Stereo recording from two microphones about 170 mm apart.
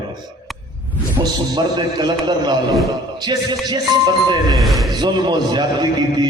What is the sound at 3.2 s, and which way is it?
Speech, 25° right (ahead or behind).